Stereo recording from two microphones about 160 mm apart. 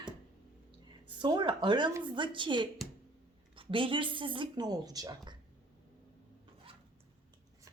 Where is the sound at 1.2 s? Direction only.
30° right (ahead or behind).